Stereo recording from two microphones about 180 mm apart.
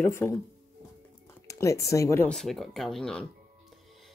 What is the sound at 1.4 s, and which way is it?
Speech, 15° left (ahead or behind).